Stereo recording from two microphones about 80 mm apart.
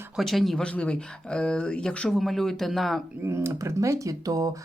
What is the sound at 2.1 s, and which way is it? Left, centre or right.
Speech, centre.